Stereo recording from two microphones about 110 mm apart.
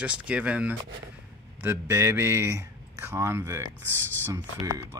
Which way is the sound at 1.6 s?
20° right (ahead or behind).